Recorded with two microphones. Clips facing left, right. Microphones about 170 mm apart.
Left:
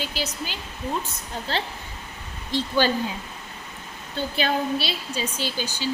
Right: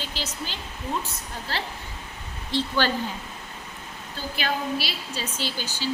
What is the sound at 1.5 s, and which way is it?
Speech, 25° left (ahead or behind).